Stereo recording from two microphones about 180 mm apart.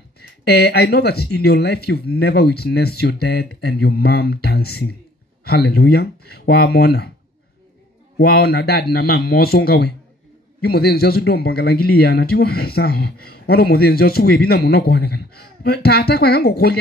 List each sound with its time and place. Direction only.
0.5 s speech: 60° left (ahead or behind)
8.2 s speech: 60° left (ahead or behind)